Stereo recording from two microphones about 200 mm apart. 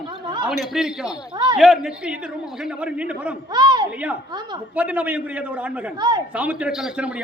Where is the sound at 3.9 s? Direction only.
5° right (ahead or behind).